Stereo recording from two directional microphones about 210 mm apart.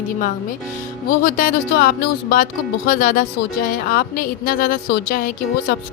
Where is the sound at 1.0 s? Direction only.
45° left (ahead or behind).